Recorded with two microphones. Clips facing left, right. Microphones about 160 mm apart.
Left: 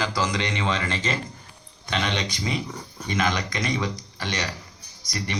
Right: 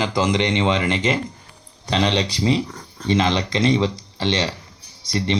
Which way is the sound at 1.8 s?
35° right (ahead or behind).